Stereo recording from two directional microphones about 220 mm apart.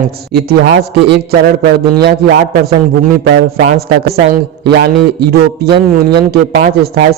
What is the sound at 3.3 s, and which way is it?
A man's voice, 50° right (ahead or behind).